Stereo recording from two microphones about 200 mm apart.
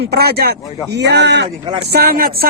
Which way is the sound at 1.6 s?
25° right (ahead or behind).